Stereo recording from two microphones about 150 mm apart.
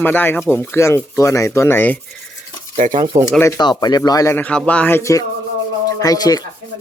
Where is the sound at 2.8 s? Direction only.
60° right (ahead or behind).